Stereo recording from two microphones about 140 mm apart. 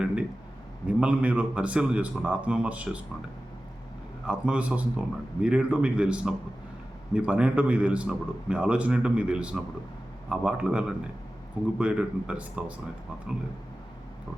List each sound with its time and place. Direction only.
0.9 s a man's voice: 10° right (ahead or behind)
4.3 s a man's voice: 10° right (ahead or behind)